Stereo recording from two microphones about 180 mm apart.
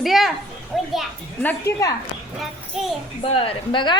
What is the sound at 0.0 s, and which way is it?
Children playing, centre (ahead or behind).